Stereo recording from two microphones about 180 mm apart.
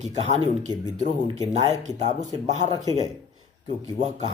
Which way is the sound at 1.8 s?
40° right (ahead or behind).